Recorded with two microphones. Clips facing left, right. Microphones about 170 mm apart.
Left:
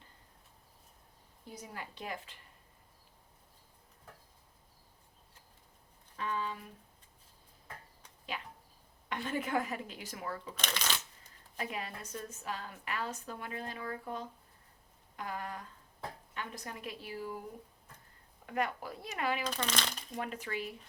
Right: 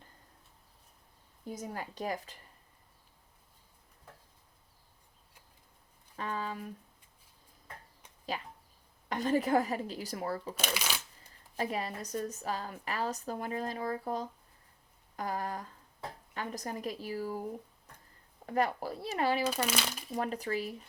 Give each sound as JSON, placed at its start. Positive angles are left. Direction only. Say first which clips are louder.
{"t": 1.5, "sound": "a woman's voice", "louder": "right 6 dB", "side_deg": -45}
{"t": 6.1, "sound": "speech", "louder": "right 1 dB", "side_deg": -40}
{"t": 8.3, "sound": "a sound", "louder": "right 3 dB", "side_deg": -40}
{"t": 9.0, "sound": "a woman's voice", "louder": "right 7 dB", "side_deg": -40}
{"t": 10.5, "sound": "shuffling cards", "louder": "right 2 dB", "side_deg": -10}
{"t": 11.5, "sound": "a woman's voice", "louder": "right 6 dB", "side_deg": -40}
{"t": 15.1, "sound": "a sound", "louder": "right 5 dB", "side_deg": -40}
{"t": 16.3, "sound": "a woman's voice", "louder": "right 8 dB", "side_deg": -40}
{"t": 18.4, "sound": "a woman's voice", "louder": "right 4 dB", "side_deg": -35}
{"t": 19.5, "sound": "a child's voice", "louder": "right 4 dB", "side_deg": -10}
{"t": 20.1, "sound": "a woman's voice", "louder": "right 6 dB", "side_deg": -35}